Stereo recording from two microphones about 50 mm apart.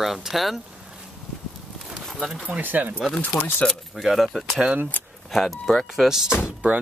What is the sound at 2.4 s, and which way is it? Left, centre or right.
Speech, right.